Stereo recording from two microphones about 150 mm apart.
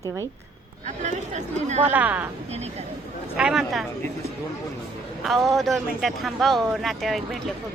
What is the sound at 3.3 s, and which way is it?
Speech, 5° right (ahead or behind).